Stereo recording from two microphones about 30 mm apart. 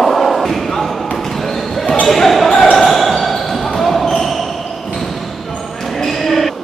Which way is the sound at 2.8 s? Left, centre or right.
Centre.